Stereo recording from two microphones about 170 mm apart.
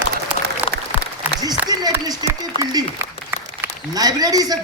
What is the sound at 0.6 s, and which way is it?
Applause, 10° right (ahead or behind).